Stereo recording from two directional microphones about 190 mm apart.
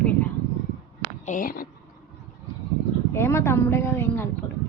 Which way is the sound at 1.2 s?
45° left (ahead or behind).